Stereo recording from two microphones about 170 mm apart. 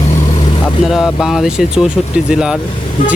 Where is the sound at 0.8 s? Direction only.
Centre (ahead or behind).